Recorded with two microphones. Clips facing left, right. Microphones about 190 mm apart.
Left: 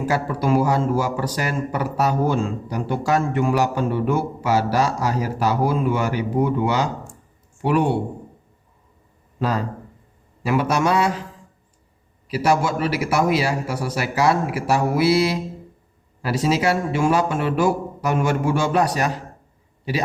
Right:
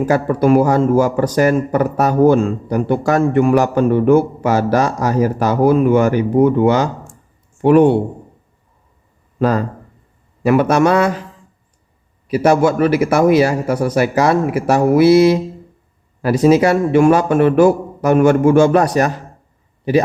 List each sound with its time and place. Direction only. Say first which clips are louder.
0.1 s speech: right 7 dB; 55° right (ahead or behind)
9.4 s speech: right 7 dB; 50° right (ahead or behind)
12.3 s speech: right 7 dB; 55° right (ahead or behind)